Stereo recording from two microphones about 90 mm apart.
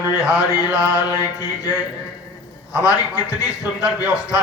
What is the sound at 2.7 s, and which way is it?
Speech, 35° left (ahead or behind).